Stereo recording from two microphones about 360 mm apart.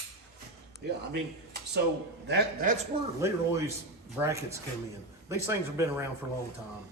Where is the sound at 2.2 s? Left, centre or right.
Right.